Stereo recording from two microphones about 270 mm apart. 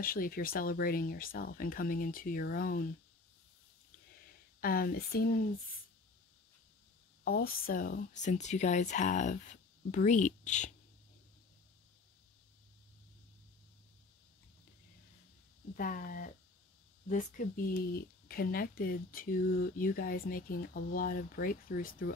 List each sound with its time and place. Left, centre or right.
0.0 s speech: left
4.6 s speech: left
7.2 s speech: left
15.7 s speech: left